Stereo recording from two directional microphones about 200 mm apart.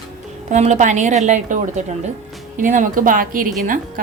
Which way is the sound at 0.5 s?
35° right (ahead or behind).